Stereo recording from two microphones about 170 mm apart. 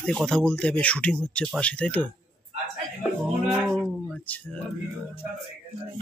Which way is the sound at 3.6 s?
5° left (ahead or behind).